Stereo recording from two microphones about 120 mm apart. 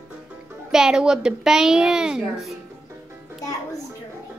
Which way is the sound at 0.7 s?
5° right (ahead or behind).